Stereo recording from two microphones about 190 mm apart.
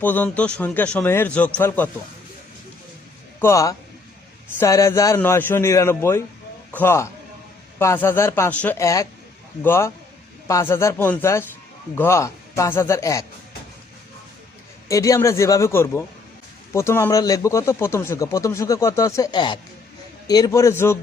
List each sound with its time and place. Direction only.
0.0 s speech: 10° left (ahead or behind)
3.4 s speech: 15° left (ahead or behind)
14.8 s speech: 15° left (ahead or behind)